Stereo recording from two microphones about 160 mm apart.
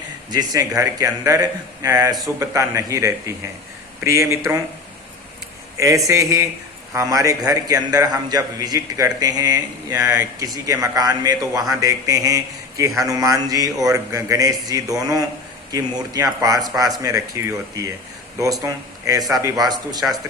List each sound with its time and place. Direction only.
0.3 s a man's voice: 25° right (ahead or behind)
5.7 s a man's voice: 20° right (ahead or behind)